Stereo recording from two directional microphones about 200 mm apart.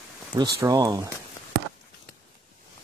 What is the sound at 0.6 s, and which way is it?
Speech, 20° right (ahead or behind).